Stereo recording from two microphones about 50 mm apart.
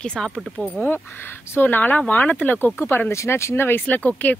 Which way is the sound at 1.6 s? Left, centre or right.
Left.